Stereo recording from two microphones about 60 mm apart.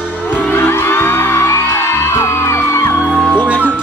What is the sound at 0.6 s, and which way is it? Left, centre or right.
Music, left.